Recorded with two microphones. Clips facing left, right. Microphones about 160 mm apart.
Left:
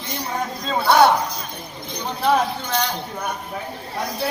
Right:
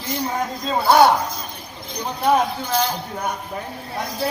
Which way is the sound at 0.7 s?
5° right (ahead or behind).